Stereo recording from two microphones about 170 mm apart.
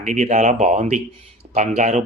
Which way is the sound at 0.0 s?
45° right (ahead or behind).